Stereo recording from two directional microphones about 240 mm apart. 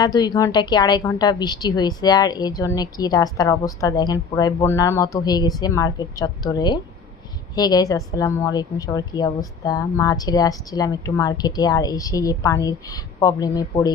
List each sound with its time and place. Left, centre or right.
0.0 s a woman's voice: centre